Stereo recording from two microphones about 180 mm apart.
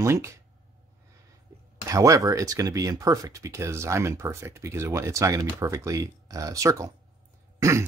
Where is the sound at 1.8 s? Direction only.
20° right (ahead or behind).